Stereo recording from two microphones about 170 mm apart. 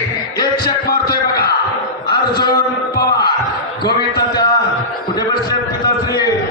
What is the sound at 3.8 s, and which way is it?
Basketball bounce, 25° left (ahead or behind).